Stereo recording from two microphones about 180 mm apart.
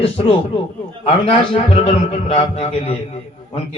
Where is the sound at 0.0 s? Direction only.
30° left (ahead or behind).